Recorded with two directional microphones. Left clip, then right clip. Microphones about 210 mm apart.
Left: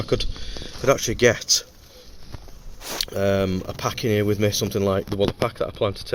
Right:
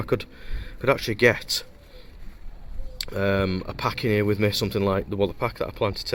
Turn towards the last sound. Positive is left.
turn(degrees=0)  # may be behind; listen again after turning